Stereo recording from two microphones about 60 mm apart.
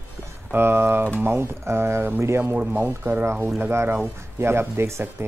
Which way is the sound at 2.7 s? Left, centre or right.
Right.